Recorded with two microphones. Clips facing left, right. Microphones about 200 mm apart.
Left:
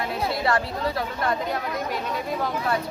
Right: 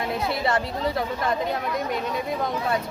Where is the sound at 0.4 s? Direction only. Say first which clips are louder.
Even; 20° right (ahead or behind).